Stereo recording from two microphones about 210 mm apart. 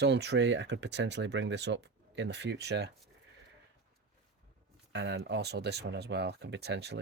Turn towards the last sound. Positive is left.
turn(degrees=-55)  # may be behind; listen again after turning